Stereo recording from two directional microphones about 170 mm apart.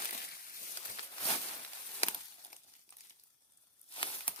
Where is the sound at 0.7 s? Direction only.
35° left (ahead or behind).